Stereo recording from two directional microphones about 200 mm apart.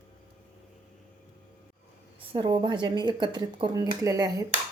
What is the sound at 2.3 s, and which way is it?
Speech, 25° right (ahead or behind).